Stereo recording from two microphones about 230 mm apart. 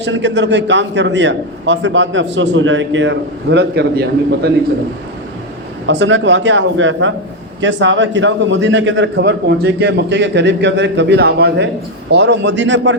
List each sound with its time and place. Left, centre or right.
0.0 s a man's voice: right
5.9 s a man's voice: right